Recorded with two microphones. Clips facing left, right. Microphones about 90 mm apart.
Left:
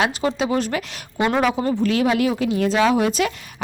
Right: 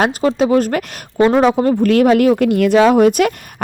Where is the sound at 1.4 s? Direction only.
30° right (ahead or behind).